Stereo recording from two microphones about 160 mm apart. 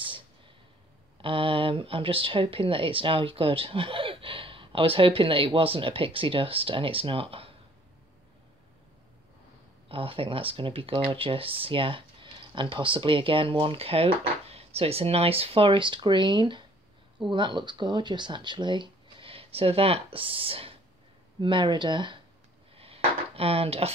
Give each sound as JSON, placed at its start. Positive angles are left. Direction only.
{"t": 1.2, "sound": "speech", "side_deg": -35}
{"t": 9.8, "sound": "speech", "side_deg": -35}
{"t": 22.8, "sound": "a sound", "side_deg": -35}